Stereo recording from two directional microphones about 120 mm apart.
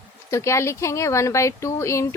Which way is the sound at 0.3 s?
25° left (ahead or behind).